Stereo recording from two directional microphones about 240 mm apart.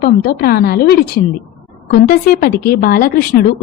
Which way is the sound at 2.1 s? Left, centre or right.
Left.